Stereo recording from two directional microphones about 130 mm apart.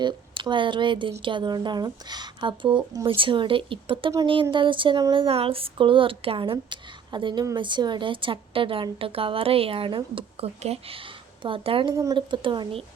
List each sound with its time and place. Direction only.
0.0 s speech: 35° right (ahead or behind)
2.9 s speech: 25° right (ahead or behind)
3.2 s a woman's voice: 40° right (ahead or behind)